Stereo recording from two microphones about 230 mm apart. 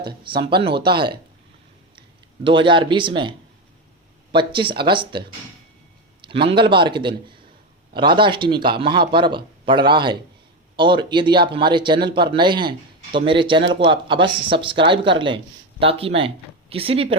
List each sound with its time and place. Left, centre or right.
0.3 s speech: right
2.4 s speech: right
6.2 s a man's voice: right